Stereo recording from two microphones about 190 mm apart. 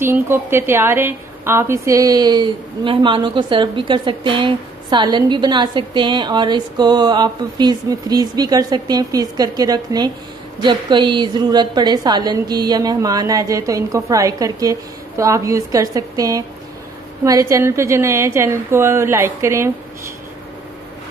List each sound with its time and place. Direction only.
0.0 s a woman's voice: 10° right (ahead or behind)